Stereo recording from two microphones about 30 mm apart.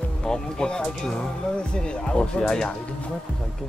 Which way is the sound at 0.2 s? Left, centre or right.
Left.